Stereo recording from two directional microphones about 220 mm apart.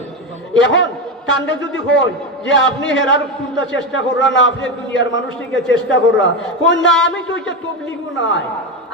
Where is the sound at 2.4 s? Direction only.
55° left (ahead or behind).